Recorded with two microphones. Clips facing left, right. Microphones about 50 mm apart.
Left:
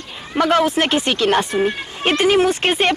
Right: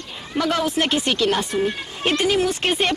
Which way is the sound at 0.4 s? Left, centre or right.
Left.